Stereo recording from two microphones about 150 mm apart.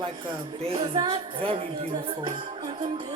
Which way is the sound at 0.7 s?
40° right (ahead or behind).